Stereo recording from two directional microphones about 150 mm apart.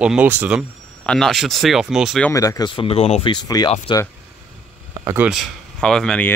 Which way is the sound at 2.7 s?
35° left (ahead or behind).